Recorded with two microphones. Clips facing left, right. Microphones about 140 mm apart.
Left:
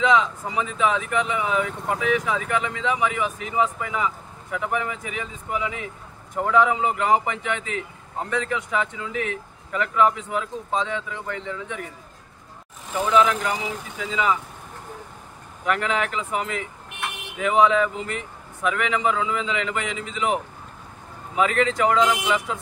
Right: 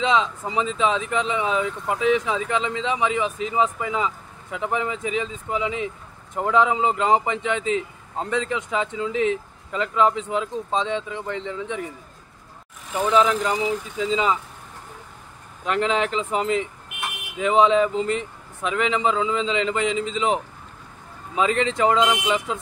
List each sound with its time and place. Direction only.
0.0 s speech: 25° right (ahead or behind)
13.1 s speech: 30° right (ahead or behind)
15.6 s speech: 25° right (ahead or behind)
21.4 s speech: 25° right (ahead or behind)